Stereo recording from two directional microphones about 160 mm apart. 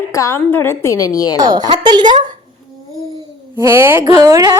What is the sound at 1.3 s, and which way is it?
Speech, 25° right (ahead or behind).